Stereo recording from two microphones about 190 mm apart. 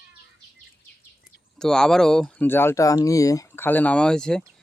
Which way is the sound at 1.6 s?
5° left (ahead or behind).